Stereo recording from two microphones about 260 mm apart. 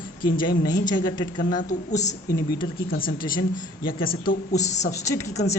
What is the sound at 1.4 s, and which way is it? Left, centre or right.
A woman's voice, left.